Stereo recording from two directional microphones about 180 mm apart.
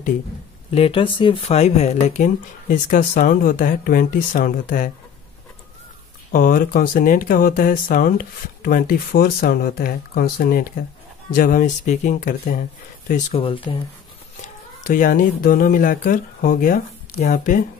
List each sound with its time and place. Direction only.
0.7 s speech: 30° left (ahead or behind); by 4.9 s 50° left (ahead or behind)
6.3 s speech: 50° left (ahead or behind)
13.1 s speech: 30° left (ahead or behind)
14.4 s speech: 50° left (ahead or behind)